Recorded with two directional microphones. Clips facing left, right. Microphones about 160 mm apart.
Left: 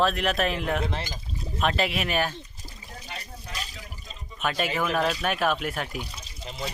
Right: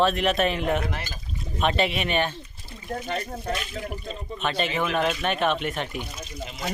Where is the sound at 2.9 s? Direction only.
55° right (ahead or behind).